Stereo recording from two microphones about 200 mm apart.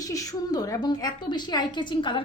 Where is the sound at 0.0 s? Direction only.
15° left (ahead or behind).